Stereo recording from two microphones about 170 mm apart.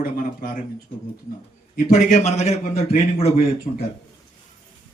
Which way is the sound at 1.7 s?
50° left (ahead or behind).